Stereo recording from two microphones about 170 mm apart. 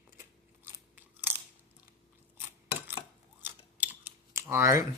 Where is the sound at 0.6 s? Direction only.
15° right (ahead or behind).